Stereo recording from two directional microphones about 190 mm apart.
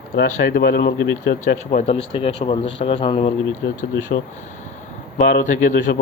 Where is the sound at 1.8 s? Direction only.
30° left (ahead or behind).